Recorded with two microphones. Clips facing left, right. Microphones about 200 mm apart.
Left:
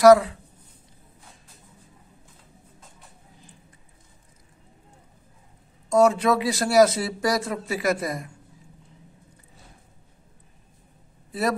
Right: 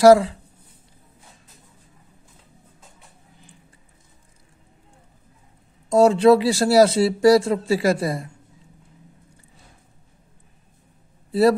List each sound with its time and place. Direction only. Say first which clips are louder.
0.0 s speech: right 2 dB; 30° right (ahead or behind)
5.9 s speech: right 5 dB; 30° right (ahead or behind)